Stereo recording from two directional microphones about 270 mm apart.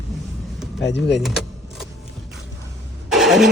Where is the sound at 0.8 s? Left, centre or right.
Left.